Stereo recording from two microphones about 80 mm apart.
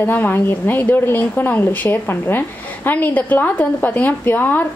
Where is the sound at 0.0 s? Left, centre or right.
Left.